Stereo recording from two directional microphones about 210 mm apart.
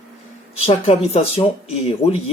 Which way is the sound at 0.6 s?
30° left (ahead or behind).